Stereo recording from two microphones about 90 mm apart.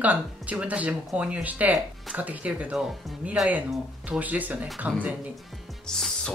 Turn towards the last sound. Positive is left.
turn(degrees=5)  # may be behind; listen again after turning